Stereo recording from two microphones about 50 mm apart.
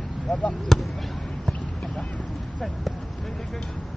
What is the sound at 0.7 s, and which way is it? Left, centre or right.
Basketball bounce, centre.